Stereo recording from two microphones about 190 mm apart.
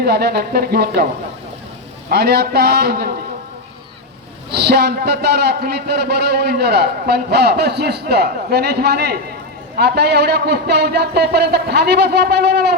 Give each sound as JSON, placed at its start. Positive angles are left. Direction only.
{"t": 0.0, "sound": "a man's voice", "side_deg": -60}
{"t": 2.0, "sound": "a man's voice", "side_deg": -60}
{"t": 4.5, "sound": "a man's voice", "side_deg": -60}